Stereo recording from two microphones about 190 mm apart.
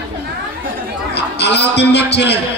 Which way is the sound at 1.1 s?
65° left (ahead or behind).